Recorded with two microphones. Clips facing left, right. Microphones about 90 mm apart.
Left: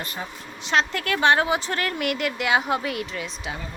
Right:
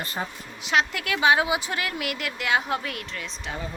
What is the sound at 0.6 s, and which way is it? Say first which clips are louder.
A woman's voice: left 1 dB; 5° right (ahead or behind).